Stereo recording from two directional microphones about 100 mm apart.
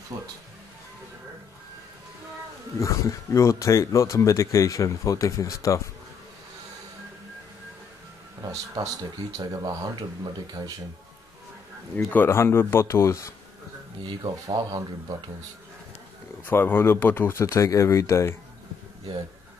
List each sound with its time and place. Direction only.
0.1 s speech: 35° right (ahead or behind)
2.8 s speech: 30° left (ahead or behind)
8.5 s speech: 35° right (ahead or behind)
12.1 s speech: 20° left (ahead or behind)
14.0 s speech: 45° right (ahead or behind)
16.4 s speech: 20° left (ahead or behind)